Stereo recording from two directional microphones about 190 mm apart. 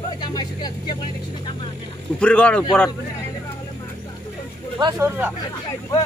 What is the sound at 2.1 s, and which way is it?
Speech, 5° left (ahead or behind).